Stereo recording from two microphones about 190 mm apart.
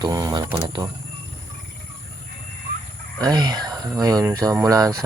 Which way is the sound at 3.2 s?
20° right (ahead or behind).